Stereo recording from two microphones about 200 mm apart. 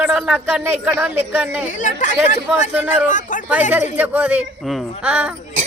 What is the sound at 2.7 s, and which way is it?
Speech, 10° right (ahead or behind).